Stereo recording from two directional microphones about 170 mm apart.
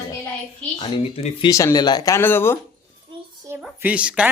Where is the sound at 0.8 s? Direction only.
35° left (ahead or behind).